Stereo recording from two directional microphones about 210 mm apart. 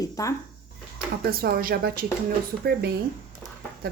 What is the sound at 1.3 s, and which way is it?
Speech, 45° right (ahead or behind).